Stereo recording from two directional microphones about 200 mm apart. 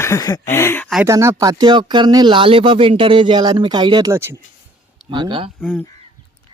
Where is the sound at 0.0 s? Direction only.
15° left (ahead or behind).